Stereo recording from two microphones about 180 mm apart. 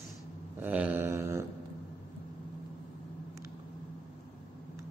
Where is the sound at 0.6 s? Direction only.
10° right (ahead or behind).